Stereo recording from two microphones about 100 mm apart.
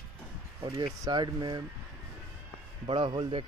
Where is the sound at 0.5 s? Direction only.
40° right (ahead or behind).